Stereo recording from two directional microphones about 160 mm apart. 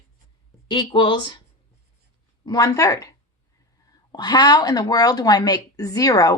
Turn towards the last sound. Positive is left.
turn(degrees=20)  # may be behind; listen again after turning